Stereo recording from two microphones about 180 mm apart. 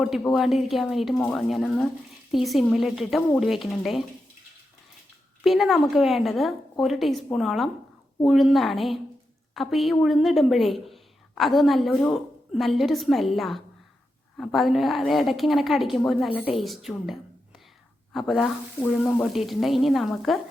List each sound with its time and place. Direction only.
0.0 s a woman's voice: centre (ahead or behind)
5.4 s a woman's voice: centre (ahead or behind)